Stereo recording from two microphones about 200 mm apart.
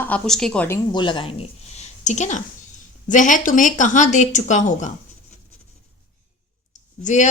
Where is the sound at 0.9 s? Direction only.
25° left (ahead or behind); by 4.9 s 40° left (ahead or behind).